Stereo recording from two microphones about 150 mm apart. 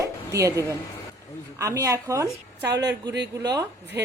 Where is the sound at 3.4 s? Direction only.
25° right (ahead or behind).